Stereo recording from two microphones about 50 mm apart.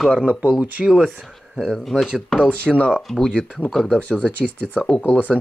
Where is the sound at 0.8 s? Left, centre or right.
Centre.